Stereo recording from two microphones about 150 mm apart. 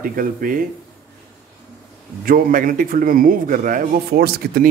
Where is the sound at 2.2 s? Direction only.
65° right (ahead or behind); by 4.6 s 90° right.